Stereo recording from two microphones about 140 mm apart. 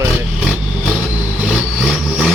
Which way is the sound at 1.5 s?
5° right (ahead or behind).